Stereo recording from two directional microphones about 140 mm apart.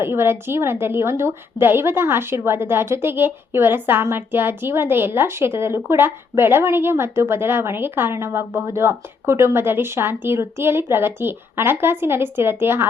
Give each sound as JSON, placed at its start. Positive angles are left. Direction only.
{"t": 0.0, "sound": "a woman's voice", "side_deg": -15}